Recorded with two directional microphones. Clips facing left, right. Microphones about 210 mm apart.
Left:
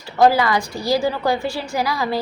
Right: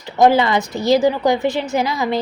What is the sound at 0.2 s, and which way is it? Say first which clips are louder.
A woman's voice: right 2 dB; 20° right (ahead or behind).